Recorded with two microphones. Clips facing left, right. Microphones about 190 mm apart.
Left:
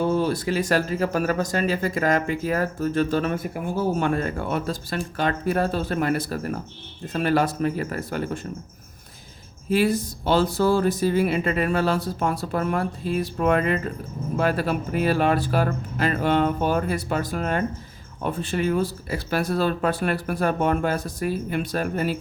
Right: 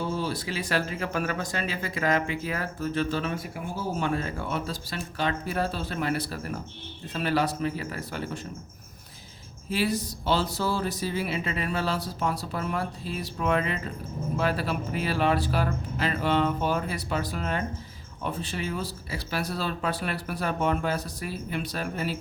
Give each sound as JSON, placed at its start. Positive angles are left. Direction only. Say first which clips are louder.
{"t": 0.0, "sound": "speech", "louder": "left 8 dB", "side_deg": 55}
{"t": 9.6, "sound": "speech", "louder": "left 6 dB", "side_deg": 50}